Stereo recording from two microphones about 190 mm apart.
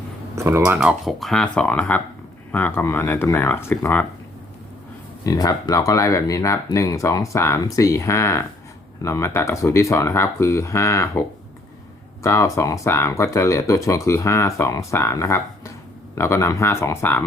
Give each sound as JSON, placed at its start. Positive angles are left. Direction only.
{"t": 0.3, "sound": "speech", "side_deg": -10}
{"t": 5.2, "sound": "speech", "side_deg": 20}